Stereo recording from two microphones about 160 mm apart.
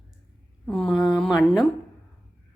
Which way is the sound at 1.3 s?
25° left (ahead or behind).